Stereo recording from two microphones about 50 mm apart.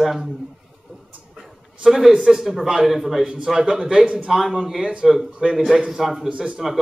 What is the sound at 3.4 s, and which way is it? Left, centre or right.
Speech, centre.